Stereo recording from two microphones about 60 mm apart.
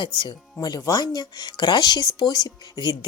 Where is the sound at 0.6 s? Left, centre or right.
Left.